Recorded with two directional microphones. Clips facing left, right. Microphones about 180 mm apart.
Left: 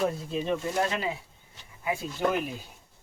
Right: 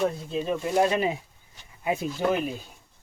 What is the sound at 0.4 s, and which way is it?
Speech, 15° right (ahead or behind).